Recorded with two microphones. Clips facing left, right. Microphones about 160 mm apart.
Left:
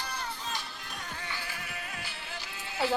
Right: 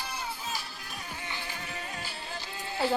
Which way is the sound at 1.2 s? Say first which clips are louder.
Right 1 dB; 25° right (ahead or behind).